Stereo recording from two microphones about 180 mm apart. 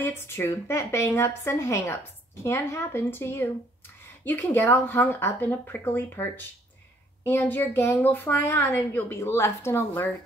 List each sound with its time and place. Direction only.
0.0 s a woman's voice: 15° left (ahead or behind)